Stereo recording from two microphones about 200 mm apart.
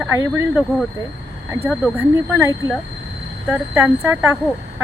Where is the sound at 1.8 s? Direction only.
10° right (ahead or behind).